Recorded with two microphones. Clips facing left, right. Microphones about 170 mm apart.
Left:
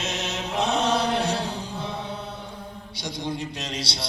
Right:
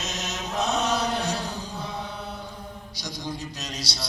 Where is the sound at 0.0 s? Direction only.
30° left (ahead or behind).